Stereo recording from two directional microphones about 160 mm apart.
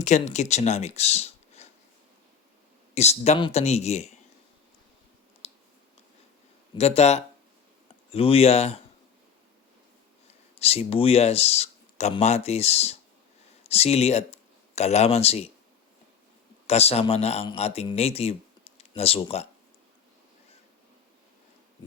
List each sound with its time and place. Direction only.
0.0 s speech: 45° left (ahead or behind)
2.9 s speech: 45° left (ahead or behind)
5.4 s clicking: 40° left (ahead or behind)
6.7 s speech: 40° left (ahead or behind)
10.6 s speech: 40° left (ahead or behind)
16.6 s a man's voice: 40° left (ahead or behind)